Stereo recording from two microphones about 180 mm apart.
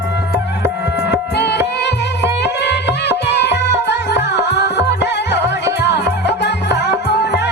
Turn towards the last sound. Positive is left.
turn(degrees=70)  # may be behind; listen again after turning